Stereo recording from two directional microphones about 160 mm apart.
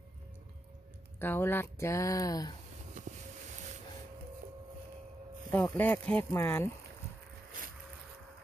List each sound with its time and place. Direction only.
1.2 s speech: 15° left (ahead or behind)
5.5 s speech: 10° left (ahead or behind)
7.6 s boat: 55° right (ahead or behind)